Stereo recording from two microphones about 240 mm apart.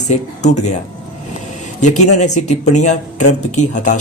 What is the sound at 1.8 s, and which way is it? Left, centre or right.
Speech, left.